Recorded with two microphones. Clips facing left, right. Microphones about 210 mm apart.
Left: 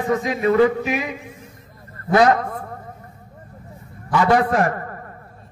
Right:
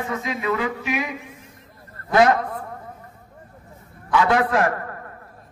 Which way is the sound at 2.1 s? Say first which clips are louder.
Left 1 dB; 40° left (ahead or behind).